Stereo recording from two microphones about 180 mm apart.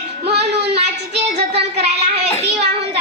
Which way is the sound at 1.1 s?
65° right (ahead or behind).